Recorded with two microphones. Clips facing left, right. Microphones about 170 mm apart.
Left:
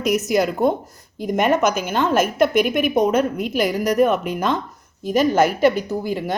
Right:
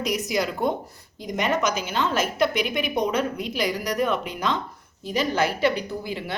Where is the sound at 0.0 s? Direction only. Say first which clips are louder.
Left 7 dB; 50° left (ahead or behind).